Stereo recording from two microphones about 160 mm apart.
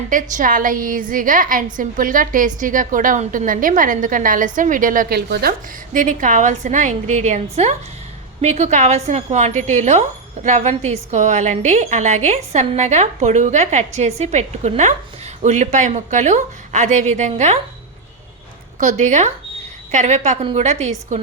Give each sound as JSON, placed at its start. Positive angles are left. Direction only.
{"t": 0.1, "sound": "a woman's voice", "side_deg": -55}
{"t": 18.8, "sound": "a woman's voice", "side_deg": -50}